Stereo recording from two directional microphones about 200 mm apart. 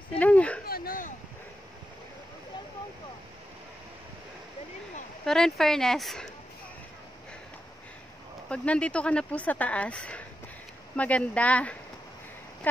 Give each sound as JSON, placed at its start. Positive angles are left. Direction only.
{"t": 0.2, "sound": "speech", "side_deg": 5}
{"t": 0.7, "sound": "speech", "side_deg": 45}
{"t": 5.2, "sound": "speech", "side_deg": 0}
{"t": 8.5, "sound": "speech", "side_deg": 5}